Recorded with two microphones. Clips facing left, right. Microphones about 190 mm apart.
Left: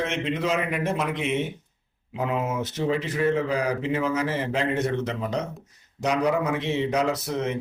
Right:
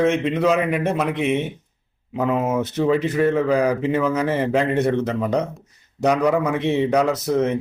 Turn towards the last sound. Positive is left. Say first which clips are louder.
# right 6 dB
turn(degrees=-55)  # may be behind; listen again after turning